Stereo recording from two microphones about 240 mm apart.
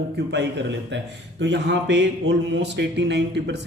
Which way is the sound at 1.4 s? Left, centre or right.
Right.